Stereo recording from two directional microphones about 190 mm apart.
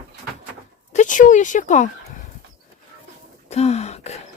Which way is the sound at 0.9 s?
45° left (ahead or behind).